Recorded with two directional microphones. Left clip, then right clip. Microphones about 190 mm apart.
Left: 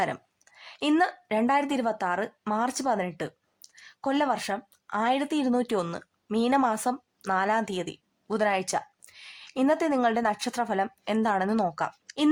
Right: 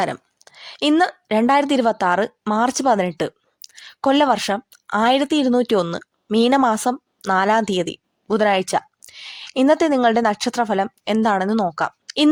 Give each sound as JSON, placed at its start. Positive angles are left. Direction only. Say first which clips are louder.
{"t": 0.0, "sound": "a woman's voice", "louder": "right 6 dB", "side_deg": -30}